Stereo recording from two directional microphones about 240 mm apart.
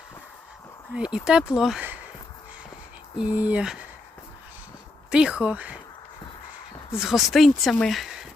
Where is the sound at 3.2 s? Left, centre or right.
Centre.